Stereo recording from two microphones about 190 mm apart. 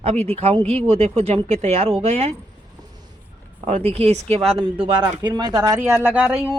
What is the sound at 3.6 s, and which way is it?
Speech, 35° right (ahead or behind).